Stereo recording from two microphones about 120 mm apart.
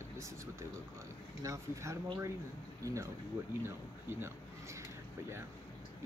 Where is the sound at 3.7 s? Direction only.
20° right (ahead or behind).